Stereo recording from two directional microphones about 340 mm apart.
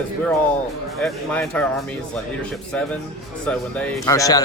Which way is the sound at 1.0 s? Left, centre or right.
Centre.